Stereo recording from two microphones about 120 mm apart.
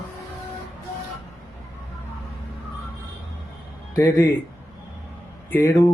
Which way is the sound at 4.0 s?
25° left (ahead or behind).